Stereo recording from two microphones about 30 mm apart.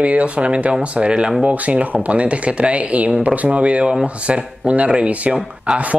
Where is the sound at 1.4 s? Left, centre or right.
Right.